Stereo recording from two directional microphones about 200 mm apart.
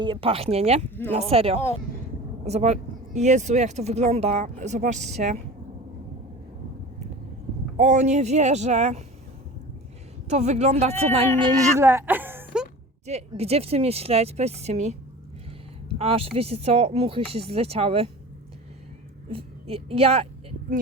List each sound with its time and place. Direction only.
0.0 s speech: 25° right (ahead or behind)
7.8 s speech: 35° right (ahead or behind)
10.2 s speech: 35° right (ahead or behind)
11.8 s speech: 10° right (ahead or behind)
13.1 s speech: 30° right (ahead or behind)
16.0 s speech: 30° right (ahead or behind)
19.3 s a woman's voice: 30° right (ahead or behind)